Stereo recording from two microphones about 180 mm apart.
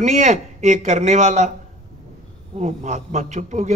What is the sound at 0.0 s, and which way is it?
A man's voice, 40° right (ahead or behind).